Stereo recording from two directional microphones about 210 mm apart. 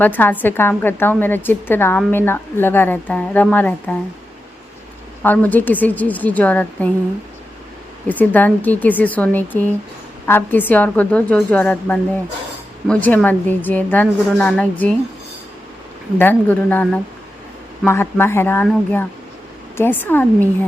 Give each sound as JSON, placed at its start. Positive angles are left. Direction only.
{"t": 0.0, "sound": "a woman's voice", "side_deg": 10}
{"t": 5.2, "sound": "a woman's voice", "side_deg": 10}
{"t": 8.0, "sound": "a woman's voice", "side_deg": 10}
{"t": 16.1, "sound": "a woman's voice", "side_deg": 10}